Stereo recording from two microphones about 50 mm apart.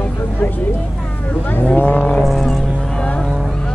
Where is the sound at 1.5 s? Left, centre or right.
Left.